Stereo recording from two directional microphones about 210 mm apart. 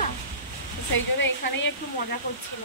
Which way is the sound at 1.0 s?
60° left (ahead or behind).